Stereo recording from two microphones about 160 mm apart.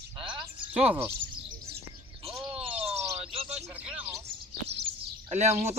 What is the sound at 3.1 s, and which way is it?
Bird, 40° right (ahead or behind).